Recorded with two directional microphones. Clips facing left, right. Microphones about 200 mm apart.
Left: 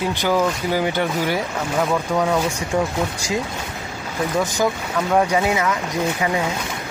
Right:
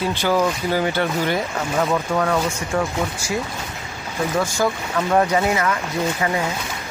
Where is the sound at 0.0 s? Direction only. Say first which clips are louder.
Even; 15° left (ahead or behind).